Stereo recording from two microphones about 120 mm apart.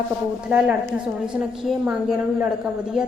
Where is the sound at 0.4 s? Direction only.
10° right (ahead or behind).